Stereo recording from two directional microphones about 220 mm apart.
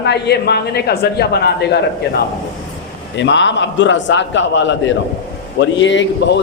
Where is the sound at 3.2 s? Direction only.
55° left (ahead or behind).